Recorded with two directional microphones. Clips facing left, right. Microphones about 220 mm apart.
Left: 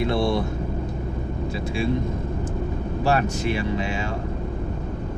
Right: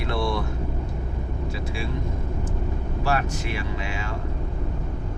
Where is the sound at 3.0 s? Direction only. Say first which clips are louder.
Left 4 dB; 25° left (ahead or behind).